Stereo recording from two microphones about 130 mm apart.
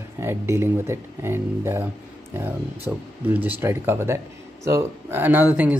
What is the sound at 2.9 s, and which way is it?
Speech, 15° right (ahead or behind).